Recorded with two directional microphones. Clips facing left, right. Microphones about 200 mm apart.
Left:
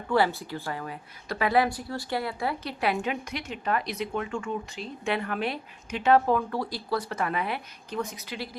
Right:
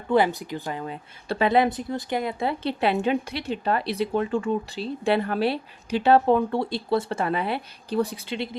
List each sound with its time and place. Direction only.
0.1 s speech: 20° right (ahead or behind)